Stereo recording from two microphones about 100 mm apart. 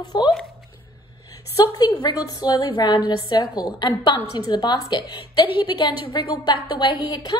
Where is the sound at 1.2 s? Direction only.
40° left (ahead or behind).